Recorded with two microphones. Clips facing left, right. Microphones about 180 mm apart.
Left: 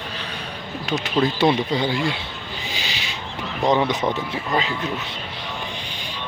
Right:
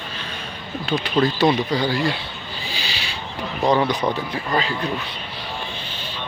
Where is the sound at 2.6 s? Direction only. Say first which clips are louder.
Right 1 dB; 20° left (ahead or behind).